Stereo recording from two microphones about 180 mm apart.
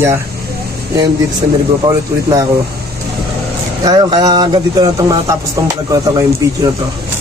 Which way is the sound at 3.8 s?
25° right (ahead or behind).